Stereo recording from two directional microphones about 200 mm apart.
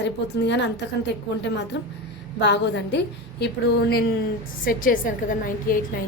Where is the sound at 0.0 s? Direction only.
60° left (ahead or behind).